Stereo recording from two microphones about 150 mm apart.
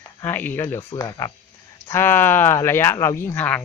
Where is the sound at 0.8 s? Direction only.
25° left (ahead or behind).